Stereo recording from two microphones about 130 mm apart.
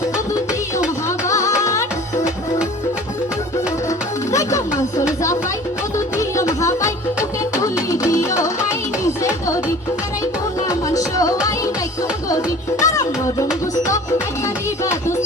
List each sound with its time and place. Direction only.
1.3 s music: 25° left (ahead or behind)
4.3 s music: 25° left (ahead or behind)
6.1 s music: 25° left (ahead or behind)
8.1 s music: 25° left (ahead or behind)
10.7 s music: 25° left (ahead or behind)
12.8 s music: 25° left (ahead or behind)